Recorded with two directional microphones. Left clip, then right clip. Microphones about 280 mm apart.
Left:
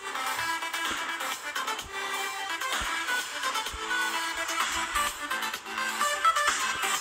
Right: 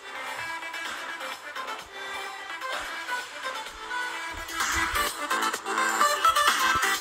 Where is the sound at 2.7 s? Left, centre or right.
Centre.